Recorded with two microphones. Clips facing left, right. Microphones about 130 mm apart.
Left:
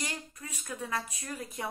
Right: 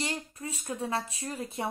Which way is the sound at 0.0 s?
30° right (ahead or behind).